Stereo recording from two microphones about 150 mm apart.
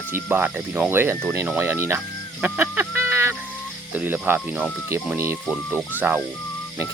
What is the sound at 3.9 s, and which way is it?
Speech, 10° right (ahead or behind).